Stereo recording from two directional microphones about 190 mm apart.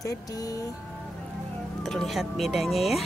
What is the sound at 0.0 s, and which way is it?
Speech, 15° left (ahead or behind).